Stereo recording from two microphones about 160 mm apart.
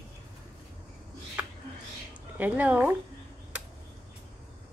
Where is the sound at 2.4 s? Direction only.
10° right (ahead or behind).